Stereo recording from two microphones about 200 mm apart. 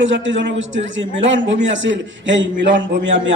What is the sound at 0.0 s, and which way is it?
A man's voice, 70° right (ahead or behind).